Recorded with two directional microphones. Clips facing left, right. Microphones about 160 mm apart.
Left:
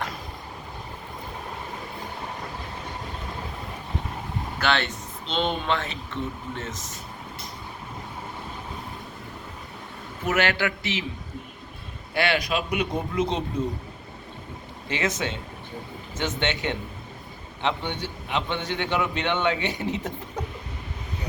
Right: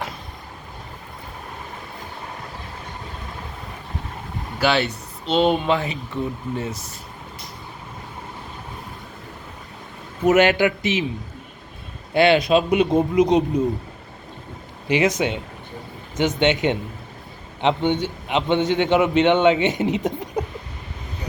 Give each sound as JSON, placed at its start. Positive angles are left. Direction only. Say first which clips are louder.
{"t": 4.6, "sound": "speech", "louder": "right 6 dB", "side_deg": -10}
{"t": 10.2, "sound": "a man's voice", "louder": "right 9 dB", "side_deg": -20}
{"t": 12.1, "sound": "a man's voice", "louder": "right 9 dB", "side_deg": -25}
{"t": 14.8, "sound": "a man's voice", "louder": "right 8 dB", "side_deg": -15}